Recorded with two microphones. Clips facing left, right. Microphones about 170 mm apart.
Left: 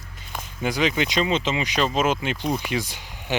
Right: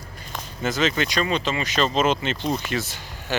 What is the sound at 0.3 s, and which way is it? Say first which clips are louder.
Speech: even; 10° left (ahead or behind).